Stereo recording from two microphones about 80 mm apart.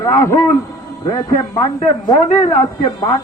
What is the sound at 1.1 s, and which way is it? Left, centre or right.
Speech, left.